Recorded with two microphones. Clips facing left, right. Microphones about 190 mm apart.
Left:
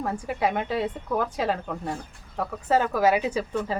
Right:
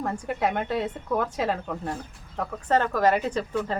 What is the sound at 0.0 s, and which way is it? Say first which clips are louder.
A woman's voice: even; centre (ahead or behind).